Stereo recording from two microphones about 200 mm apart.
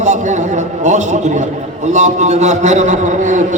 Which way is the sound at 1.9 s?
35° right (ahead or behind).